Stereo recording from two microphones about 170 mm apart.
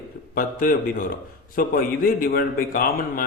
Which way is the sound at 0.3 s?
55° left (ahead or behind).